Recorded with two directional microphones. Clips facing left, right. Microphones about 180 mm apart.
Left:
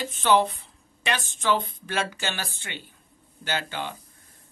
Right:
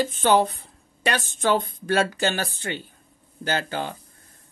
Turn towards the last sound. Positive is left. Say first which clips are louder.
# right 4 dB
turn(degrees=-40)  # may be behind; listen again after turning